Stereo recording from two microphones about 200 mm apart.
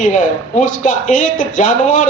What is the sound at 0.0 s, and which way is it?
Speech, 40° left (ahead or behind).